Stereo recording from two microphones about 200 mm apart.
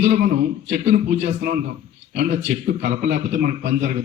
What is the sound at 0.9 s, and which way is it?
Speech, 35° right (ahead or behind).